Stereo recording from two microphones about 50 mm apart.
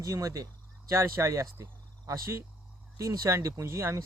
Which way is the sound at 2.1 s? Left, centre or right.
Right.